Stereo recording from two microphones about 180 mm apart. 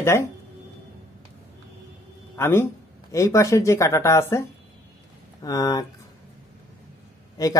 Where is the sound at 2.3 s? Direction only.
15° left (ahead or behind).